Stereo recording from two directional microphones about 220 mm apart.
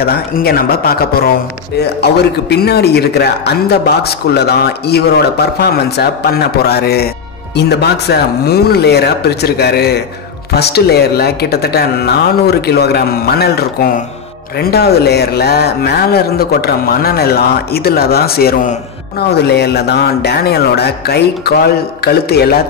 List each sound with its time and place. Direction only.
0.0 s a man's voice: 45° left (ahead or behind)
2.5 s a man's voice: 45° left (ahead or behind)